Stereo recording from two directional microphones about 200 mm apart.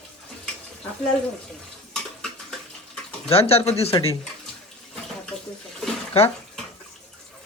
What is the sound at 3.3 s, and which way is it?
Speech, 30° left (ahead or behind).